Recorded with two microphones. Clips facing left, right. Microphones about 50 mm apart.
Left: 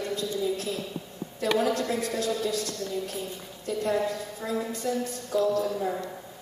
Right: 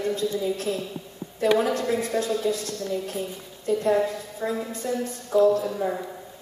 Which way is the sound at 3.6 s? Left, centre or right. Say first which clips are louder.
Right 5 dB; right.